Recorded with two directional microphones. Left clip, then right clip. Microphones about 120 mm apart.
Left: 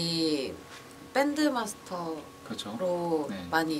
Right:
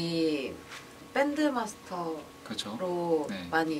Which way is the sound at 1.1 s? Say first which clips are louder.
Left 1 dB; 20° left (ahead or behind).